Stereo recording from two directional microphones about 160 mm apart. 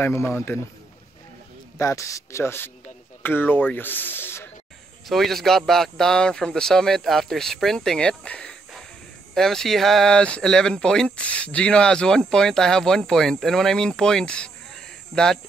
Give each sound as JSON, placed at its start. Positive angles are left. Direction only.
{"t": 0.0, "sound": "a man's voice", "side_deg": 15}
{"t": 1.8, "sound": "speech", "side_deg": 20}
{"t": 5.0, "sound": "speech", "side_deg": 0}